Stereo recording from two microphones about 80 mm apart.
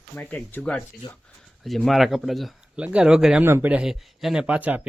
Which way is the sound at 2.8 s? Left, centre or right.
Centre.